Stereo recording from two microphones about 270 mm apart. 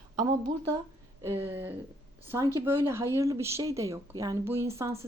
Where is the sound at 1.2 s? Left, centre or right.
Centre.